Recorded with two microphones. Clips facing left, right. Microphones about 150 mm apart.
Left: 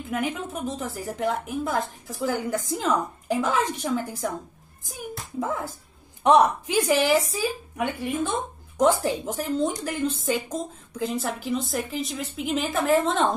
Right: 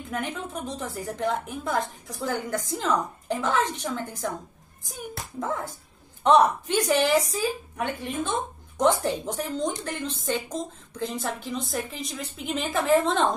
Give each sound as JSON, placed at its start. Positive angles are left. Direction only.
{"t": 0.1, "sound": "a woman's voice", "side_deg": 5}
{"t": 5.4, "sound": "a woman's voice", "side_deg": 5}